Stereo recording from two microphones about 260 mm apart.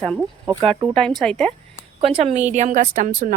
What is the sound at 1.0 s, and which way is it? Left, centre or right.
Speech, centre.